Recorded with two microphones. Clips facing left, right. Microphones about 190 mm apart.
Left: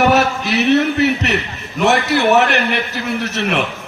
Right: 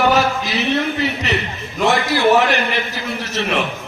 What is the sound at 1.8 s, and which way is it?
A man's voice, 65° left (ahead or behind).